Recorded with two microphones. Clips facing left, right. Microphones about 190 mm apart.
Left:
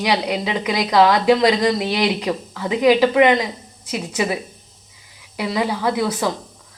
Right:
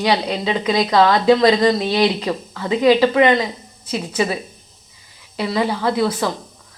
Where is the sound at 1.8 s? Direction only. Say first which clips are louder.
Right 3 dB; 30° right (ahead or behind).